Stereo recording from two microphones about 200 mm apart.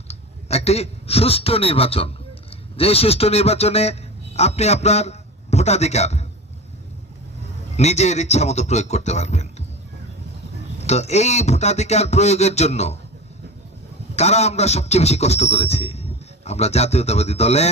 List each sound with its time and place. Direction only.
0.1 s a man's voice: 30° left (ahead or behind)
7.8 s a man's voice: 35° left (ahead or behind)
10.8 s a man's voice: 35° left (ahead or behind)
14.2 s a man's voice: 35° left (ahead or behind)